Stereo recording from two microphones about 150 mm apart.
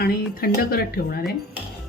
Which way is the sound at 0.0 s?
90° left.